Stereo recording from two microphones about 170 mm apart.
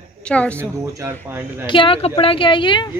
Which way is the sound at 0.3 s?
10° left (ahead or behind).